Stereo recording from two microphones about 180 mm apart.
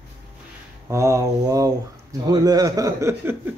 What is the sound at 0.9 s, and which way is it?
A man's voice, 15° right (ahead or behind).